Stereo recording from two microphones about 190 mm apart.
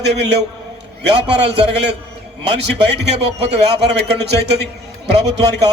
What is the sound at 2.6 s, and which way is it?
Speech, 60° right (ahead or behind).